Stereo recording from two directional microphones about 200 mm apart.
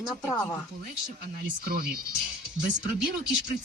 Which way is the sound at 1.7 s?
45° right (ahead or behind).